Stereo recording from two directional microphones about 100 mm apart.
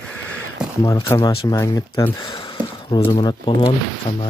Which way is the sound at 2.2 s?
40° left (ahead or behind).